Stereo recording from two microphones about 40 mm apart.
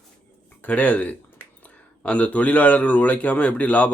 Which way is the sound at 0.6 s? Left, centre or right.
Left.